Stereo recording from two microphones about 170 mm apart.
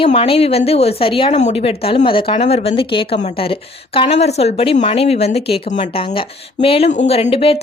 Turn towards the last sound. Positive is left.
turn(degrees=35)  # may be behind; listen again after turning